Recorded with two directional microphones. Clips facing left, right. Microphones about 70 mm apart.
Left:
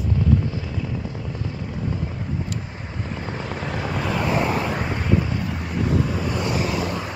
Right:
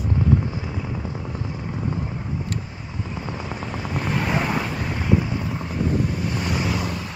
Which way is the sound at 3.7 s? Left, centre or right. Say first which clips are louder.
Left 3 dB; left.